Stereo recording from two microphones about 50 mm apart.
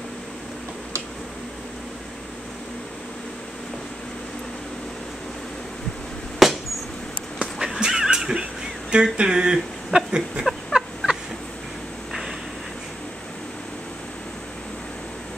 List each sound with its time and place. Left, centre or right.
6.4 s glass: centre
7.5 s cat: centre
7.8 s dog: centre
8.9 s a sound: centre
10.4 s fowl: centre
12.1 s a sound: centre